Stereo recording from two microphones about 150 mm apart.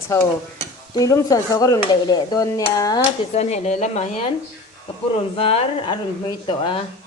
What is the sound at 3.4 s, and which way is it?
Speech, 45° left (ahead or behind).